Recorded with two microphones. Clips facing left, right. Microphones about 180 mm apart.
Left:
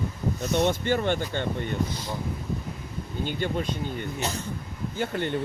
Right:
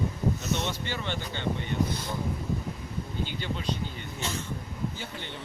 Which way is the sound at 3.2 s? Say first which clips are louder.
Left 5 dB; 50° left (ahead or behind).